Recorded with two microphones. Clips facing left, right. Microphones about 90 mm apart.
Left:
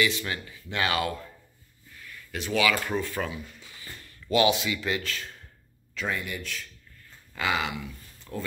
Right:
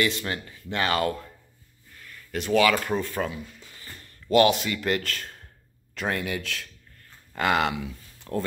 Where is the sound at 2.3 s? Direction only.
40° right (ahead or behind).